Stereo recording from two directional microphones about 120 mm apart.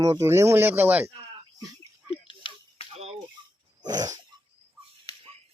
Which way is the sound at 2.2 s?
45° left (ahead or behind).